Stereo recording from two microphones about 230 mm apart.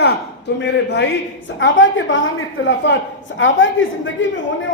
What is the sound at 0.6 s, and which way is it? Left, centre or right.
A woman's voice, left.